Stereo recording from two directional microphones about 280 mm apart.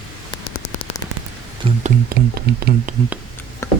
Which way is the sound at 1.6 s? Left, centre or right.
Right.